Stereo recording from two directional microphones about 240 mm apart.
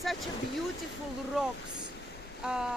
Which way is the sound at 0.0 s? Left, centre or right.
Centre.